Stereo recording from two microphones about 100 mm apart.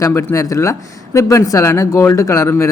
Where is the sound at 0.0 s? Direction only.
25° left (ahead or behind).